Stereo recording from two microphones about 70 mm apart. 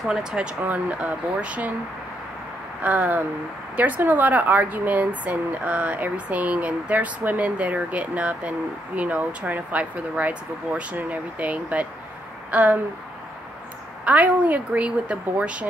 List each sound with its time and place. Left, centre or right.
0.0 s speech: centre
0.7 s speech: right
2.8 s speech: right
14.0 s speech: right